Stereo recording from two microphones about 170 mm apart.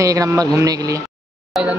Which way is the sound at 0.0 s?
20° right (ahead or behind).